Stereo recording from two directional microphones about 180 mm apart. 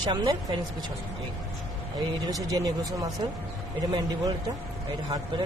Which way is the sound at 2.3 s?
20° right (ahead or behind).